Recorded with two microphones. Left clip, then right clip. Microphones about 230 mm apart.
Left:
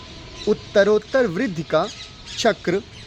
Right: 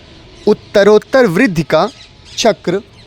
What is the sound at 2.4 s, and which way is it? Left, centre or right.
Speech, right.